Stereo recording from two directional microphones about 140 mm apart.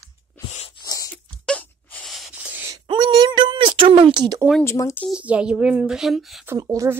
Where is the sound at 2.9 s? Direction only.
35° right (ahead or behind).